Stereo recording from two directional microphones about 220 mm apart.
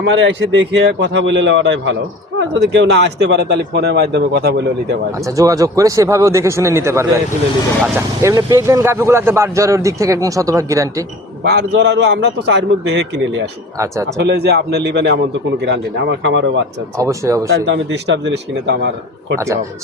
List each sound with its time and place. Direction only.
0.0 s a man's voice: 55° right (ahead or behind)
5.2 s speech: 15° right (ahead or behind)
11.4 s a man's voice: 50° right (ahead or behind)
13.7 s speech: 15° right (ahead or behind)
14.2 s a man's voice: 50° right (ahead or behind)
17.0 s speech: 15° right (ahead or behind)
17.7 s a man's voice: 55° right (ahead or behind)